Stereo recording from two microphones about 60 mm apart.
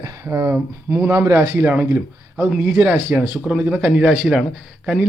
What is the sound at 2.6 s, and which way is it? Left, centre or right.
A man's voice, right.